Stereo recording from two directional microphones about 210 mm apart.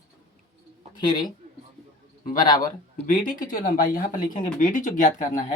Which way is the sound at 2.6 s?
40° left (ahead or behind).